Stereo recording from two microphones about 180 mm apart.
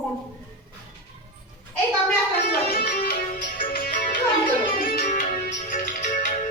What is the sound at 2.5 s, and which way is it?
Music, 50° left (ahead or behind).